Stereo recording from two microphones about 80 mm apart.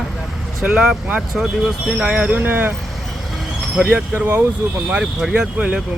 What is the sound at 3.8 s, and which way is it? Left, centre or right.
Speech, right.